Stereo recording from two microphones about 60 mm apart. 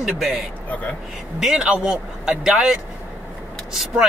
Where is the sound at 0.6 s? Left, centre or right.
Left.